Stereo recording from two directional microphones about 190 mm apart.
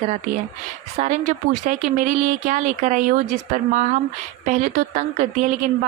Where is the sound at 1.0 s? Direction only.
40° right (ahead or behind).